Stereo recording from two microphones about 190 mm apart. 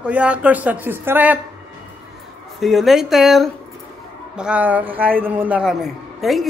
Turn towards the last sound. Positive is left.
turn(degrees=0)  # may be behind; listen again after turning